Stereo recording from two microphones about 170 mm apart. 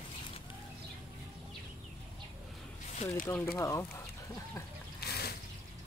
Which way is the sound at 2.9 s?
40° left (ahead or behind).